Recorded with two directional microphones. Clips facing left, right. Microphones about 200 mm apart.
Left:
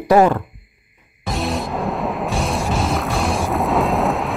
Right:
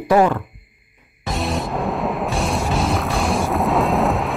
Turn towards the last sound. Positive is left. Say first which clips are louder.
# even
turn(degrees=0)  # may be behind; listen again after turning